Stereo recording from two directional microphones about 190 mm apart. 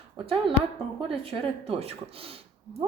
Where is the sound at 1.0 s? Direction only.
30° right (ahead or behind).